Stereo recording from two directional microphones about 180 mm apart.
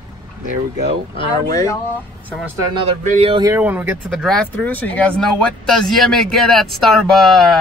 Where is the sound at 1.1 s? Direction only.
20° left (ahead or behind).